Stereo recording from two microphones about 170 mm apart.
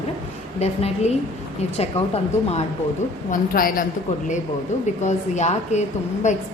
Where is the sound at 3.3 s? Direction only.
55° left (ahead or behind).